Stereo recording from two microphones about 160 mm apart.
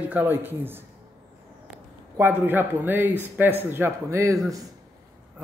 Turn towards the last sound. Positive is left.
turn(degrees=-20)  # may be behind; listen again after turning